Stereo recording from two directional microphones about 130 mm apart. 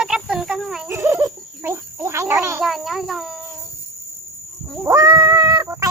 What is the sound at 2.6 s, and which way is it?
Insect, centre (ahead or behind).